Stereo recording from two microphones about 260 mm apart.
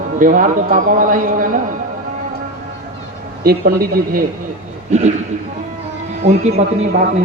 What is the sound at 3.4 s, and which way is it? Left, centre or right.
A man's voice, right.